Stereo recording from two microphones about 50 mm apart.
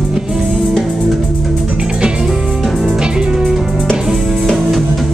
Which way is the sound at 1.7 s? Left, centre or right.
Centre.